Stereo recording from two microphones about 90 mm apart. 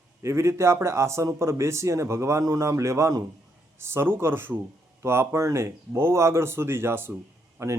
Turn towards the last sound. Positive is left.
turn(degrees=-30)  # may be behind; listen again after turning